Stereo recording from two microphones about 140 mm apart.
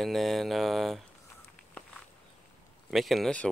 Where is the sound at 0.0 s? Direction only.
Centre (ahead or behind).